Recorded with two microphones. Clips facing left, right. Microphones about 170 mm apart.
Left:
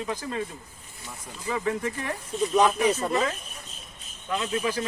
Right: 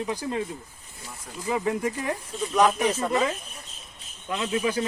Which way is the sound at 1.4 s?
15° right (ahead or behind).